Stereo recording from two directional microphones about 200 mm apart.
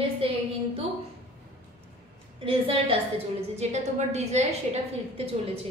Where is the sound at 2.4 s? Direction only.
30° right (ahead or behind).